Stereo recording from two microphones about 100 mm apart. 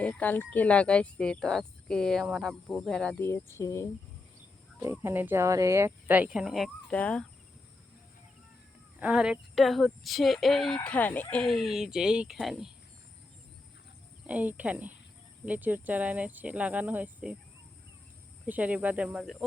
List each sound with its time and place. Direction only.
0.0 s speech: 15° left (ahead or behind)
3.2 s speech: 25° left (ahead or behind)
4.8 s speech: 30° right (ahead or behind); by 6.7 s 5° right (ahead or behind)
6.8 s speech: 10° left (ahead or behind)
9.0 s speech: 10° right (ahead or behind)
10.8 s speech: 15° left (ahead or behind)
11.4 s speech: 5° right (ahead or behind)
14.3 s speech: 15° right (ahead or behind)
18.4 s speech: 15° right (ahead or behind)
19.2 s speech: centre (ahead or behind)